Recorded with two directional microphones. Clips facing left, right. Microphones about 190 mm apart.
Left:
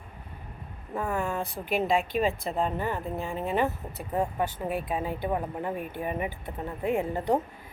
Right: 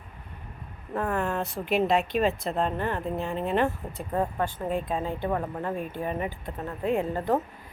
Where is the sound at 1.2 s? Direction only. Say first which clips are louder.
Right 2 dB; centre (ahead or behind).